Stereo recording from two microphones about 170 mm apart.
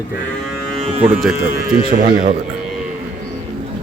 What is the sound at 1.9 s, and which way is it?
Speech, 55° right (ahead or behind).